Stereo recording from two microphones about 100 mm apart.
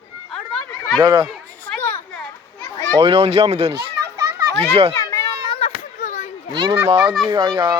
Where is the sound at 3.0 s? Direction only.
75° right (ahead or behind).